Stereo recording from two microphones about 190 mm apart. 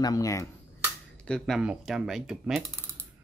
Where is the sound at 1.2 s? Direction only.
Centre (ahead or behind).